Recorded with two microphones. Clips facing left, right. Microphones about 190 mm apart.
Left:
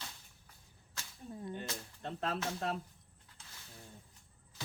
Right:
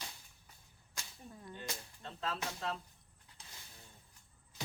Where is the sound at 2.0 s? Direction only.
55° left (ahead or behind).